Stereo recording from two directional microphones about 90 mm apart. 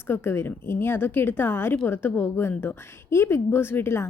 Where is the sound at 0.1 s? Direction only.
25° left (ahead or behind).